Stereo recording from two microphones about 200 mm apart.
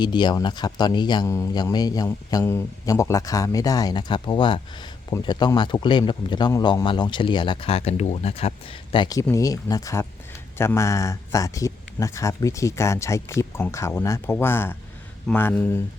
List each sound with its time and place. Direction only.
0.0 s speech: 20° left (ahead or behind)